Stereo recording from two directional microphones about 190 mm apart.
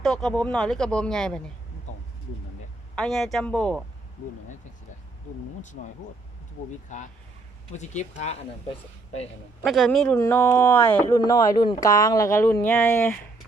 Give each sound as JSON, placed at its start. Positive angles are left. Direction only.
{"t": 0.0, "sound": "speech", "side_deg": 0}
{"t": 2.9, "sound": "speech", "side_deg": 5}
{"t": 5.8, "sound": "speech", "side_deg": 40}
{"t": 9.6, "sound": "speech", "side_deg": 0}